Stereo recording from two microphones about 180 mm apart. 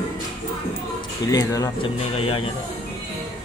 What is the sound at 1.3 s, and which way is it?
Speech, 20° left (ahead or behind).